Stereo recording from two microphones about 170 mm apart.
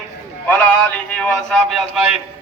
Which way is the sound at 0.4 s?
10° left (ahead or behind).